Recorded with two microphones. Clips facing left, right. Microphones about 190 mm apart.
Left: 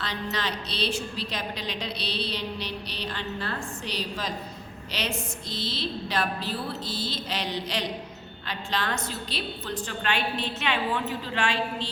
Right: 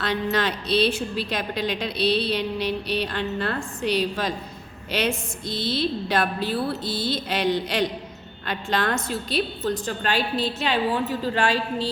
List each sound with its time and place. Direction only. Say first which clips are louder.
0.0 s a woman's voice: right 7 dB; 55° right (ahead or behind); by 11.9 s 40° right (ahead or behind)